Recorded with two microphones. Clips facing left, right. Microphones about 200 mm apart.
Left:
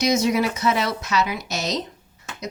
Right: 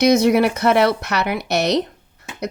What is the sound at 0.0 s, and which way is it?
A woman's voice, 60° right (ahead or behind).